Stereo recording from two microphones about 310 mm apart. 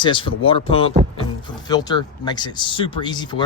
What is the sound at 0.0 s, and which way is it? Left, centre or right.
Speech, centre.